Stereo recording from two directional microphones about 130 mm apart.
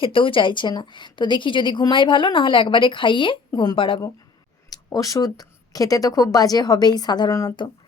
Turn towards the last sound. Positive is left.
turn(degrees=30)  # may be behind; listen again after turning